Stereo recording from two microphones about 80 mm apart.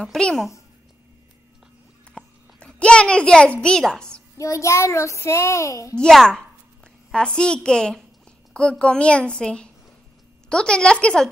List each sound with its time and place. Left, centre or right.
0.0 s a child's voice: centre
2.1 s a sound: centre
3.6 s a child's voice: centre
4.4 s a child's voice: left
5.9 s a child's voice: centre